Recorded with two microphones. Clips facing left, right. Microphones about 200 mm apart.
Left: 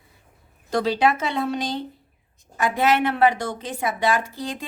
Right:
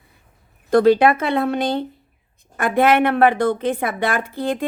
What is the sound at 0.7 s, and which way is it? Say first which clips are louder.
A woman's voice: right 8 dB; 55° right (ahead or behind).